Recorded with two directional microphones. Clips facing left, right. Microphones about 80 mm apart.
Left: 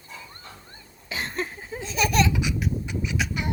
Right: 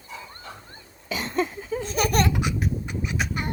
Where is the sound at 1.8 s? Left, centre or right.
Right.